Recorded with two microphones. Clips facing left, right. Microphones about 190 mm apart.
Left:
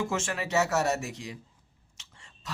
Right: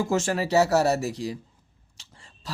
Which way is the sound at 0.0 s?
35° right (ahead or behind).